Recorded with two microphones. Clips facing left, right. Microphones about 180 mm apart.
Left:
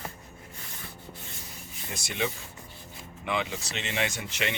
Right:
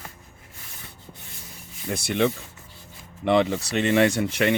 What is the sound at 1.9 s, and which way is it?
Speech, 60° right (ahead or behind).